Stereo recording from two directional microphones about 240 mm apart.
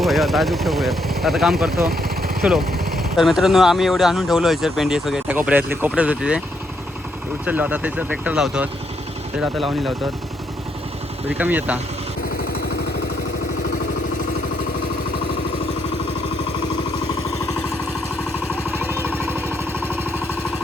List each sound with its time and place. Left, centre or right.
0.0 s speech: centre
1.7 s vehicle: right
3.0 s speech: centre
7.4 s speech: centre
11.3 s speech: centre
18.9 s jackhammer: centre